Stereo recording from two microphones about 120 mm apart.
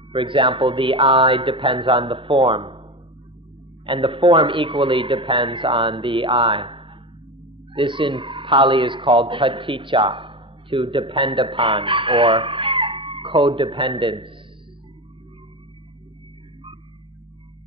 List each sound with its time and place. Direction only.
0.1 s a man's voice: 45° right (ahead or behind)
3.8 s a man's voice: 45° right (ahead or behind)